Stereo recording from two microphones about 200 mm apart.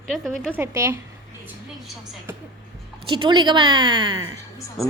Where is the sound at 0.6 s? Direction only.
15° right (ahead or behind).